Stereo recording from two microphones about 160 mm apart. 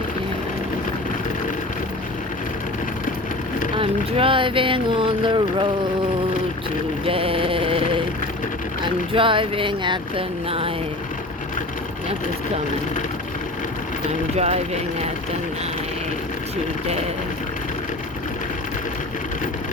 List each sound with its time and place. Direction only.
3.8 s speech: 35° right (ahead or behind)
7.0 s mantra: 35° right (ahead or behind)
8.8 s speech: 30° right (ahead or behind)
14.3 s speech: 40° right (ahead or behind)